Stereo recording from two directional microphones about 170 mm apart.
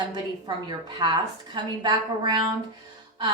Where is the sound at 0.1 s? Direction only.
25° right (ahead or behind).